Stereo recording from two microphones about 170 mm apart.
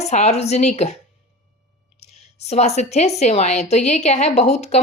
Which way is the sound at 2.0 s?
40° left (ahead or behind).